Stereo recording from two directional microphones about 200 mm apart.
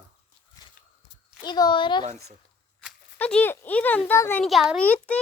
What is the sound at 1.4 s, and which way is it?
Speech, 20° left (ahead or behind).